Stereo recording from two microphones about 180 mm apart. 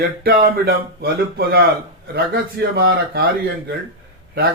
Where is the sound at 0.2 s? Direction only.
55° right (ahead or behind).